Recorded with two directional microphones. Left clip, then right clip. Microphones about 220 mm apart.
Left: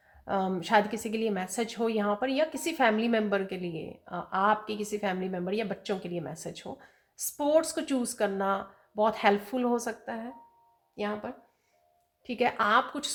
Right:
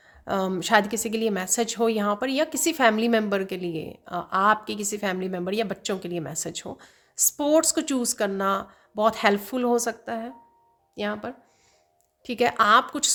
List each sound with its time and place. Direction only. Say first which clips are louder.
0.3 s a woman's voice: right 5 dB; 45° right (ahead or behind)